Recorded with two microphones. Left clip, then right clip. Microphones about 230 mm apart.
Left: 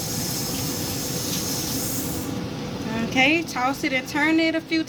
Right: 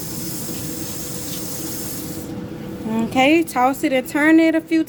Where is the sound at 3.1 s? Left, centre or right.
Right.